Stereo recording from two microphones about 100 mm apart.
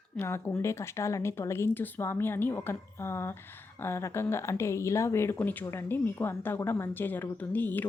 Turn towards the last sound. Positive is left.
turn(degrees=20)  # may be behind; listen again after turning